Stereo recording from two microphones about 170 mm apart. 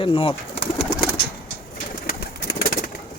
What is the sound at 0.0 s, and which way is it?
Speech, 30° left (ahead or behind).